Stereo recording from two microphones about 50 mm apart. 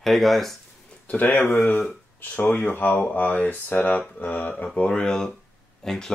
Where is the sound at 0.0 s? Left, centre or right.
Centre.